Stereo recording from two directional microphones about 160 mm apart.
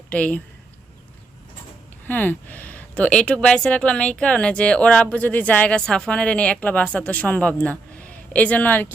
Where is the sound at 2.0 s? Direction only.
10° left (ahead or behind).